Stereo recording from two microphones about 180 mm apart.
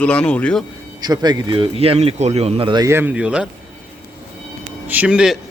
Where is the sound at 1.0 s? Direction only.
20° right (ahead or behind); by 3.5 s 5° right (ahead or behind).